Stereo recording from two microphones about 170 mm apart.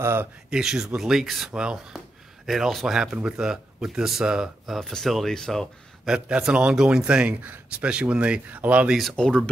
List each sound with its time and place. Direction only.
0.0 s speech: 15° right (ahead or behind)
0.5 s speech: 5° right (ahead or behind)